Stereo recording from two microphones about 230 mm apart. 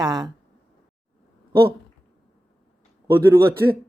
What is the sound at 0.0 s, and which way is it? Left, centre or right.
Speech, centre.